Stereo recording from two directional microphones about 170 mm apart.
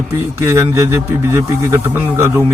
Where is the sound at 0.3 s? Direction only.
15° right (ahead or behind).